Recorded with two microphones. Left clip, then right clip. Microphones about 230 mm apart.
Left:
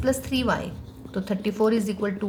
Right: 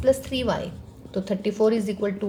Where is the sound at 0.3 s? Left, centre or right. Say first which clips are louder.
Even; centre.